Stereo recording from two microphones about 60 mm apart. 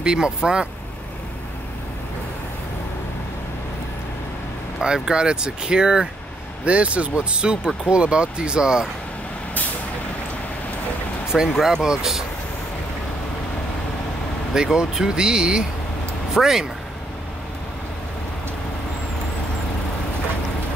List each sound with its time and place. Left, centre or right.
0.0 s speech: centre
4.8 s speech: centre
11.3 s speech: centre
14.5 s speech: centre